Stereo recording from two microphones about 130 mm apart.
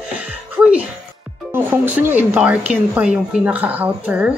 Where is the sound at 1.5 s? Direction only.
15° right (ahead or behind).